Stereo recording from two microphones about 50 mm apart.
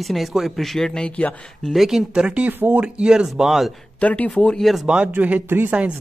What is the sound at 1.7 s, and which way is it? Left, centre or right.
Speech, centre.